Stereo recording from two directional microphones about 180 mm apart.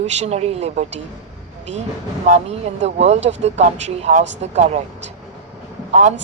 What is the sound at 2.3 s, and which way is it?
A woman's voice, 40° right (ahead or behind).